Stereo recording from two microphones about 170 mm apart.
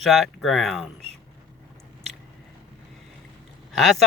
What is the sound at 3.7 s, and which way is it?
Speech, centre (ahead or behind).